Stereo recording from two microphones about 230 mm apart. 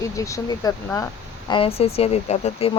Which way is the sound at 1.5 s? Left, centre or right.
Left.